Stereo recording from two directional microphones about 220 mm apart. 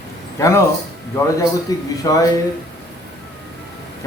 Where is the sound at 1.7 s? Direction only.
15° left (ahead or behind).